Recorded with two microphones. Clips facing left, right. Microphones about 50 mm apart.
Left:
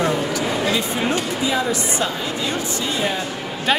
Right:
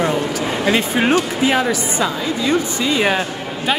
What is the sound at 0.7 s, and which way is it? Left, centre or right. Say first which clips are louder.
Speech: right 5 dB; right.